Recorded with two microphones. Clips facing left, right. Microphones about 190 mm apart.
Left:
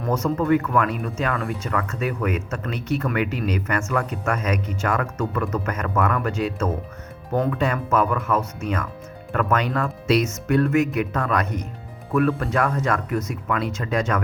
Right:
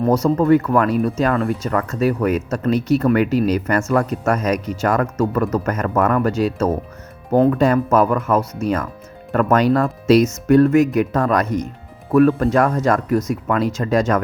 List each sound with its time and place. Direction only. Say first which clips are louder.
0.0 s speech: right 7 dB; 35° right (ahead or behind)